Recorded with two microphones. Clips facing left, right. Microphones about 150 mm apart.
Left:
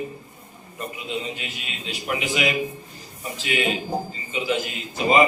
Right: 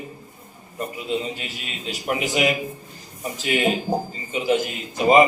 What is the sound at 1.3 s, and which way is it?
A man's voice, 40° right (ahead or behind).